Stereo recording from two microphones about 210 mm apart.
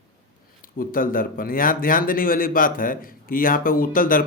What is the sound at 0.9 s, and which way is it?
Speech, 40° left (ahead or behind).